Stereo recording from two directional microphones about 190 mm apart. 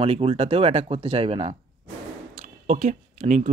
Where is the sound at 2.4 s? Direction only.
40° right (ahead or behind).